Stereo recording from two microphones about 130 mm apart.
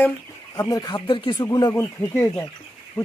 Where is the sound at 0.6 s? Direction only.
30° left (ahead or behind).